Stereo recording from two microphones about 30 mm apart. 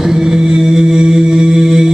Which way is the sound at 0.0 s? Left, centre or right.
Centre.